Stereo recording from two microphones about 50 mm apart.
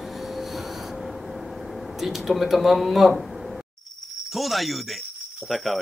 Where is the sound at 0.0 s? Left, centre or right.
Centre.